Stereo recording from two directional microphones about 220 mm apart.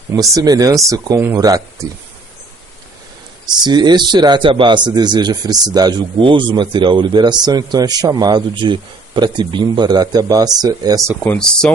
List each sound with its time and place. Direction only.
0.1 s speech: 15° right (ahead or behind)
3.7 s speech: 20° right (ahead or behind)
11.2 s speech: 5° left (ahead or behind)